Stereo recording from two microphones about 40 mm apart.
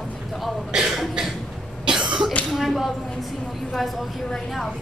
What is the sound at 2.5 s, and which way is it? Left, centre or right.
A woman's voice, centre.